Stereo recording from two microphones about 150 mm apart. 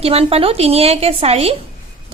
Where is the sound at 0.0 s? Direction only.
40° right (ahead or behind).